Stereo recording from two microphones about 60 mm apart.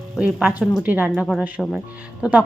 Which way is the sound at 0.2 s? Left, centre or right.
Centre.